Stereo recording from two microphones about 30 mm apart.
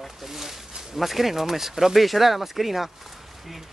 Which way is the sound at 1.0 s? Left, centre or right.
Centre.